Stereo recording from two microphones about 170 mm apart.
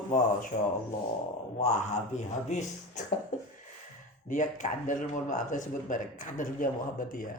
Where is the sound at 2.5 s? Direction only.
45° left (ahead or behind).